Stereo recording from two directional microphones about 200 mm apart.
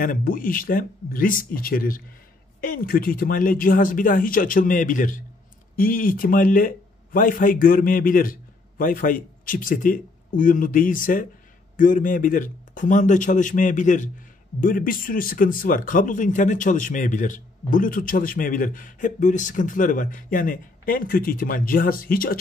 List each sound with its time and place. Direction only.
0.0 s speech: 45° left (ahead or behind)